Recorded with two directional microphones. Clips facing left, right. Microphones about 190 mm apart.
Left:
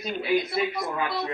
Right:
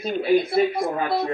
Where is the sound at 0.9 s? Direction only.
50° right (ahead or behind).